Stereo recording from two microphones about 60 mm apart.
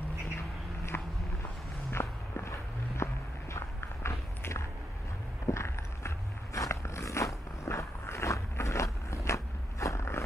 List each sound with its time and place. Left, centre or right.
0.9 s walk: left
1.9 s walk: left
5.5 s a sound: left